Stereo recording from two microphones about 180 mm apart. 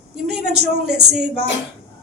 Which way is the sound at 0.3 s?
65° right (ahead or behind).